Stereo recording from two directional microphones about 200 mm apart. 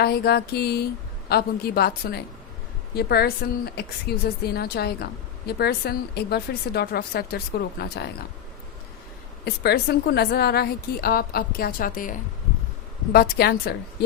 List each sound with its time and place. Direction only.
0.0 s a woman's voice: 50° left (ahead or behind)
9.4 s a woman's voice: 55° left (ahead or behind)
13.1 s a woman's voice: 50° left (ahead or behind)